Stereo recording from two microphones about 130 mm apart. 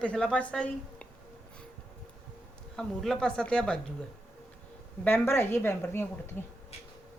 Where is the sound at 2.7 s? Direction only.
5° left (ahead or behind).